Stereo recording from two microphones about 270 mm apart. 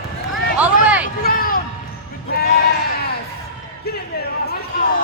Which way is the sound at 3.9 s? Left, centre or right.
Left.